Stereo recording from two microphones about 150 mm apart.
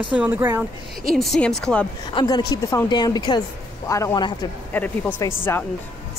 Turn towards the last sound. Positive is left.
turn(degrees=15)  # may be behind; listen again after turning